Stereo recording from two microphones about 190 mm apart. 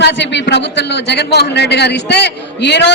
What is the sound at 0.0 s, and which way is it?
A man's voice, 65° left (ahead or behind).